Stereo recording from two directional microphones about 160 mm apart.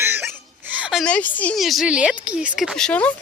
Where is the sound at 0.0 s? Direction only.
15° right (ahead or behind).